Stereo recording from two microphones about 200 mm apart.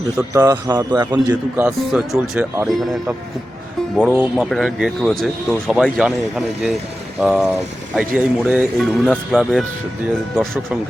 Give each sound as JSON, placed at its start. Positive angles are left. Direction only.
{"t": 0.2, "sound": "a man's voice", "side_deg": -15}
{"t": 1.8, "sound": "speech", "side_deg": 0}